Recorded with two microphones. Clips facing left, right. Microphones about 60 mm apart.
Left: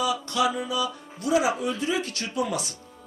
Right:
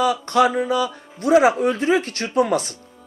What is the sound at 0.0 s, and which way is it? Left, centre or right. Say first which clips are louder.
Speech: right 7 dB; right.